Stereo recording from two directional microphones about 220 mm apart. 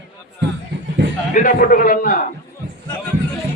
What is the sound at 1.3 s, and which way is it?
Speech, 35° left (ahead or behind).